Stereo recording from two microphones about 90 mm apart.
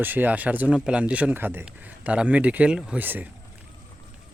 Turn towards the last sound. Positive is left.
turn(degrees=-20)  # may be behind; listen again after turning